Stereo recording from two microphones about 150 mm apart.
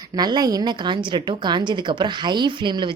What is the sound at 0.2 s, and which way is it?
A woman's voice, 25° right (ahead or behind).